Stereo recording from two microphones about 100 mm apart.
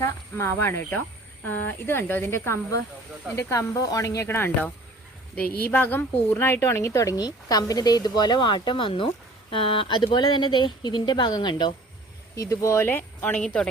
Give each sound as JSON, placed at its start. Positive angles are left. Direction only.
{"t": 0.0, "sound": "speech", "side_deg": 25}
{"t": 12.4, "sound": "speech", "side_deg": 30}